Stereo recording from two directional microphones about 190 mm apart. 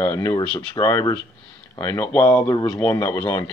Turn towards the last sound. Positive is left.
turn(degrees=20)  # may be behind; listen again after turning